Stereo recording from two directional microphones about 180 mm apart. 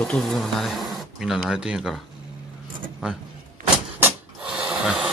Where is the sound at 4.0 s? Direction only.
5° right (ahead or behind).